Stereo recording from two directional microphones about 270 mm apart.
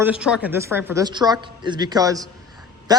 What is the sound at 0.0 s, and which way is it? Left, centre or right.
A man's voice, centre.